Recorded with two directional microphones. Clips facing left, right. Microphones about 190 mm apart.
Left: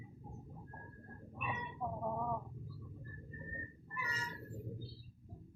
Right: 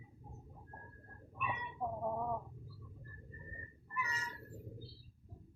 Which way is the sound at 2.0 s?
10° right (ahead or behind).